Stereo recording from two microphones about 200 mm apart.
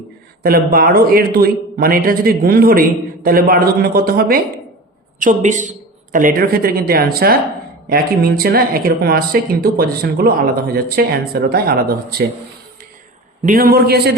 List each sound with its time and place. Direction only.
0.4 s speech: 45° right (ahead or behind)
13.4 s speech: 45° right (ahead or behind)